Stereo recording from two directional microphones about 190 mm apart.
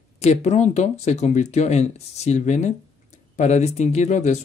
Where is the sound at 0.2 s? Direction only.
35° left (ahead or behind).